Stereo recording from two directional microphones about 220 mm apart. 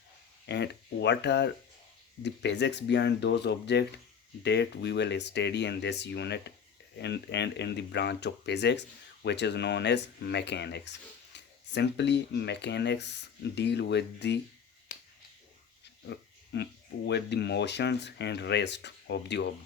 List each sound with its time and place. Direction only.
0.4 s speech: 50° left (ahead or behind)
16.0 s pig: 50° left (ahead or behind)
17.1 s speech: 50° left (ahead or behind)